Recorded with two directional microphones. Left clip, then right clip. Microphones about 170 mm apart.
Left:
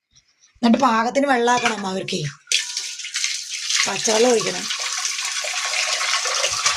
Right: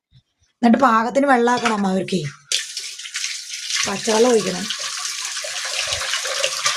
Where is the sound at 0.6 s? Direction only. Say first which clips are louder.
Right 2 dB; 40° right (ahead or behind).